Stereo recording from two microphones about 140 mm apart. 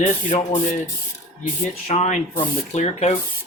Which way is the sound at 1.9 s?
55° left (ahead or behind).